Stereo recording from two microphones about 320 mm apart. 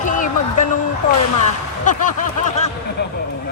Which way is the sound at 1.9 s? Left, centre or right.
Left.